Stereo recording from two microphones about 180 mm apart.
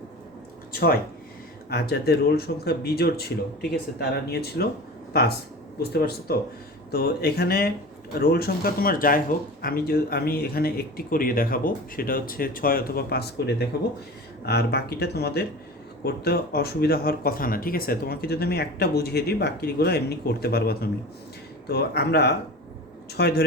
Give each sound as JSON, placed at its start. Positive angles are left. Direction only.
{"t": 0.7, "sound": "speech", "side_deg": 55}
{"t": 5.9, "sound": "speech", "side_deg": 60}